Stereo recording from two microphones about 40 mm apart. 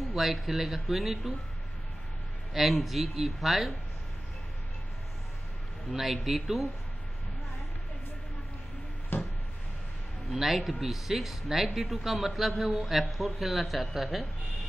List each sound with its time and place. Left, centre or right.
0.1 s speech: centre
2.5 s speech: centre
6.1 s speech: centre
9.1 s a sound: left
10.3 s speech: centre